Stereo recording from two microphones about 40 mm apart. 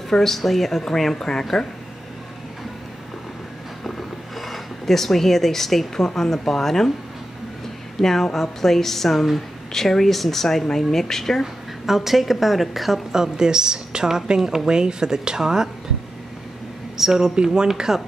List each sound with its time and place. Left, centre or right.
0.1 s speech: centre
4.4 s speech: centre
8.0 s speech: centre
11.8 s a woman's voice: centre
13.1 s a woman's voice: centre
16.9 s a woman's voice: centre